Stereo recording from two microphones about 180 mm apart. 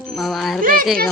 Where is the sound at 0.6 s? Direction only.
50° right (ahead or behind).